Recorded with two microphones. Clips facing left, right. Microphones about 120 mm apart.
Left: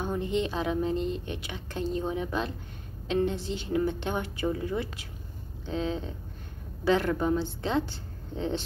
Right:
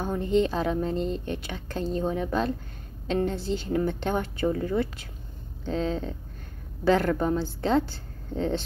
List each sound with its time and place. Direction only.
0.0 s a woman's voice: 35° right (ahead or behind)